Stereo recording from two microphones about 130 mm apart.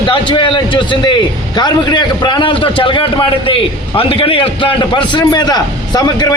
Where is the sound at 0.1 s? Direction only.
40° left (ahead or behind).